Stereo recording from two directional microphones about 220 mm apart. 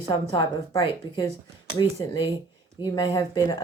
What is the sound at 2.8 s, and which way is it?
Speech, 15° left (ahead or behind).